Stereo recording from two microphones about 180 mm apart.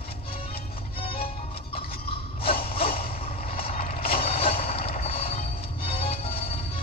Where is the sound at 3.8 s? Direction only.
35° left (ahead or behind).